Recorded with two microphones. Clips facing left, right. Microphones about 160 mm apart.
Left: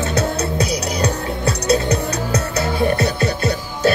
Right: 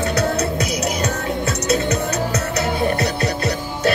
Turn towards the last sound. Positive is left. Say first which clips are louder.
# left 2 dB
turn(degrees=30)  # may be behind; listen again after turning